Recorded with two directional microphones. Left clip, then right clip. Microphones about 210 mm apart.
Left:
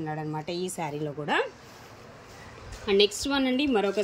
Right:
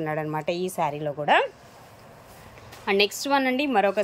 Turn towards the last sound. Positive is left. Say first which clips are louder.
# right 4 dB
turn(degrees=-5)  # may be behind; listen again after turning